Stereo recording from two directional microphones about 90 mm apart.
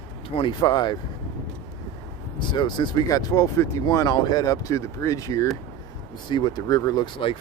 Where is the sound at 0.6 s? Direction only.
50° left (ahead or behind).